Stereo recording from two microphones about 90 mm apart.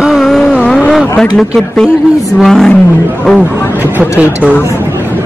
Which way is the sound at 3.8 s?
20° right (ahead or behind).